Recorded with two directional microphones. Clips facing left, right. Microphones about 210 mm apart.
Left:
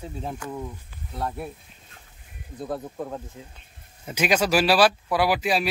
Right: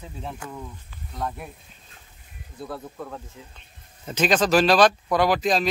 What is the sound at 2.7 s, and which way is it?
Speech, 35° left (ahead or behind).